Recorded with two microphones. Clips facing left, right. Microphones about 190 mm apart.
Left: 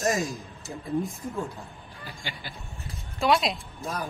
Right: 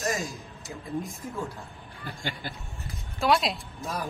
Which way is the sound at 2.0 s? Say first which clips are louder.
Right 4 dB; 50° right (ahead or behind).